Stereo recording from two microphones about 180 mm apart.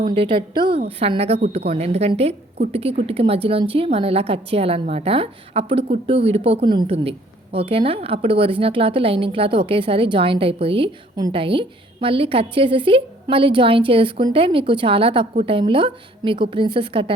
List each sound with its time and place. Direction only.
0.0 s a woman's voice: 30° right (ahead or behind)